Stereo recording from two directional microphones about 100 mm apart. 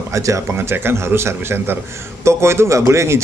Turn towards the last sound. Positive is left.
turn(degrees=-25)  # may be behind; listen again after turning